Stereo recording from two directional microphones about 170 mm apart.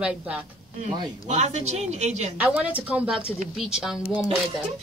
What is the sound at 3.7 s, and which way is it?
Speech, 5° right (ahead or behind).